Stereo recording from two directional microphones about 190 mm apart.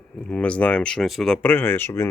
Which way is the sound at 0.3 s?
5° left (ahead or behind).